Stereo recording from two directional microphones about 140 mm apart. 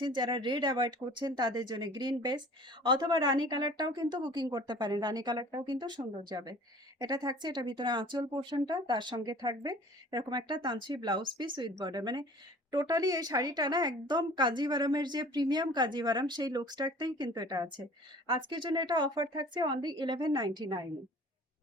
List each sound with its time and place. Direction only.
0.0 s a woman's voice: 35° right (ahead or behind)